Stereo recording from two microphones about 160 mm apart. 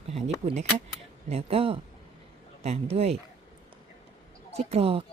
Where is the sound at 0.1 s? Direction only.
40° right (ahead or behind).